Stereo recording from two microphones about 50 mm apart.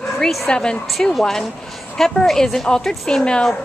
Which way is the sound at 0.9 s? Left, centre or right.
Centre.